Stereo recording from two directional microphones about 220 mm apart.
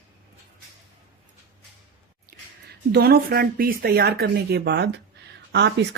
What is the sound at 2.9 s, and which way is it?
A woman's voice, 45° right (ahead or behind).